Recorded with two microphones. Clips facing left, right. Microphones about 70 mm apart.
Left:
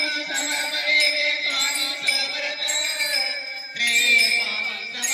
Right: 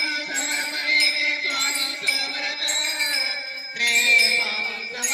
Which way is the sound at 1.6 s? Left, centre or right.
Right.